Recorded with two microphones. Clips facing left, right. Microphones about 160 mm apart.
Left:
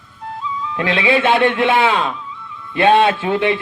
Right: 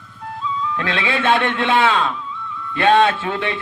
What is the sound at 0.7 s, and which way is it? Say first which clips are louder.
A man's voice: left 8 dB; 15° left (ahead or behind).